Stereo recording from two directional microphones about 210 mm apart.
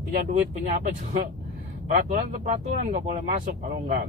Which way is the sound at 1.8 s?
40° right (ahead or behind).